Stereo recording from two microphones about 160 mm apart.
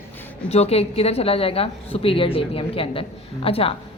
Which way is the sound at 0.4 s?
40° left (ahead or behind).